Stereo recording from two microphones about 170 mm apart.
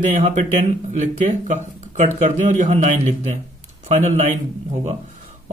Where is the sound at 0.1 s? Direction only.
40° right (ahead or behind).